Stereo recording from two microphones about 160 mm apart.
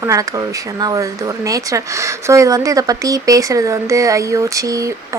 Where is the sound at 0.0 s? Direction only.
20° right (ahead or behind).